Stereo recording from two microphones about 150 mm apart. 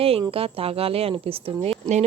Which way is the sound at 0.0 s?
40° right (ahead or behind).